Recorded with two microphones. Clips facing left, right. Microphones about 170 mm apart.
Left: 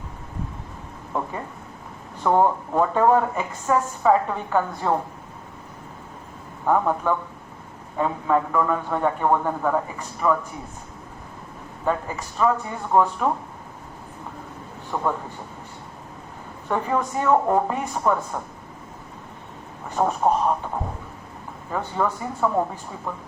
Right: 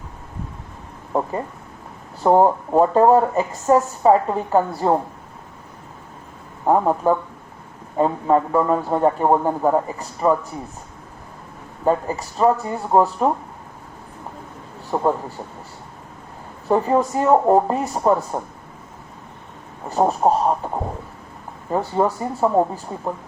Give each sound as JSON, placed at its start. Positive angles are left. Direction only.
{"t": 1.1, "sound": "speech", "side_deg": -35}
{"t": 6.7, "sound": "speech", "side_deg": -30}
{"t": 11.9, "sound": "speech", "side_deg": -35}
{"t": 14.8, "sound": "a man's voice", "side_deg": -35}
{"t": 16.6, "sound": "speech", "side_deg": -35}
{"t": 19.9, "sound": "speech", "side_deg": -35}
{"t": 21.7, "sound": "speech", "side_deg": -35}